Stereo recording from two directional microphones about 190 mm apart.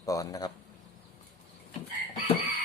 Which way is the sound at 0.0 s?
20° left (ahead or behind).